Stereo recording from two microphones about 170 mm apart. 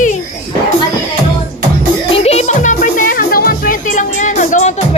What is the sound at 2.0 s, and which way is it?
Music, 35° left (ahead or behind).